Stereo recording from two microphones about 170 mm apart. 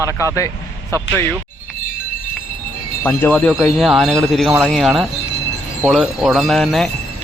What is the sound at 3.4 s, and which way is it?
Speech, 5° right (ahead or behind).